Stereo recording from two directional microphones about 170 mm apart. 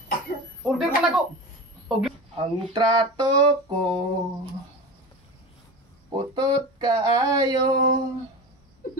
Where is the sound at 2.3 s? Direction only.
25° right (ahead or behind).